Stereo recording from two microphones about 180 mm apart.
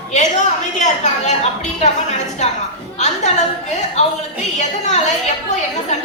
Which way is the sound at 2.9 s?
40° left (ahead or behind).